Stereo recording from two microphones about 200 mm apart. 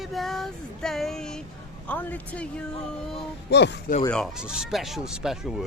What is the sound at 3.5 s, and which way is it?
Speech, 60° left (ahead or behind).